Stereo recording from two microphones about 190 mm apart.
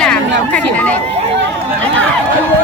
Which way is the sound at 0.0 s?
5° left (ahead or behind).